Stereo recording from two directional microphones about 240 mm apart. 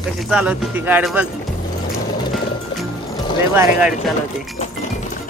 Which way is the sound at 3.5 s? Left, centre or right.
Centre.